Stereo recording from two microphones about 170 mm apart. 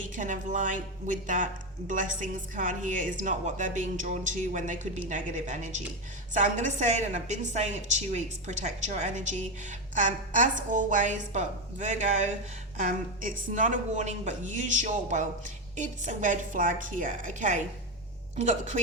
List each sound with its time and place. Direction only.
0.0 s a woman's voice: 50° right (ahead or behind)